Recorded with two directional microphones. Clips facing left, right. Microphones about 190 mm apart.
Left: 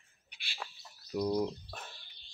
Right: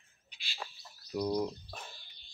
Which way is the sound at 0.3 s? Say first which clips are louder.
Even; 60° left (ahead or behind).